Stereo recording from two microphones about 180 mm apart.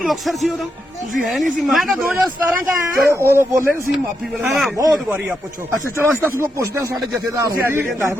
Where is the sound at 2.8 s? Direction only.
15° right (ahead or behind).